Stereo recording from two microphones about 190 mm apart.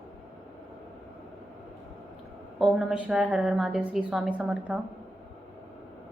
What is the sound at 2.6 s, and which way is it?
A woman's voice, centre (ahead or behind).